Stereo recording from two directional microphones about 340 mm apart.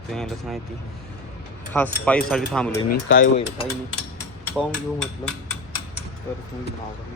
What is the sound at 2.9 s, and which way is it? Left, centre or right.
Speech, left.